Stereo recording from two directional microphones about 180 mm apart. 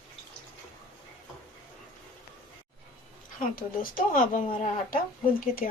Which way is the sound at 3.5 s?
50° left (ahead or behind).